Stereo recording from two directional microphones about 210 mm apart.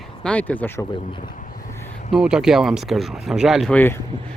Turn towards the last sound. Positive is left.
turn(degrees=5)  # may be behind; listen again after turning